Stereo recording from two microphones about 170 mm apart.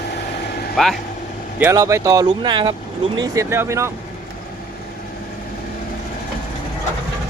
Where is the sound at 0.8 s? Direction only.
Centre (ahead or behind).